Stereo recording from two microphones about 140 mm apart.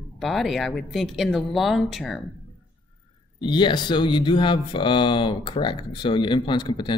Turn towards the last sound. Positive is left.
turn(degrees=35)  # may be behind; listen again after turning